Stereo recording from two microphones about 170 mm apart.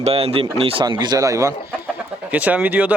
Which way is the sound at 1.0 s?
20° right (ahead or behind).